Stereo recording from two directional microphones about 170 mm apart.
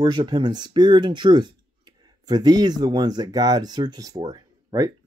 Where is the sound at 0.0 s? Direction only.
25° right (ahead or behind).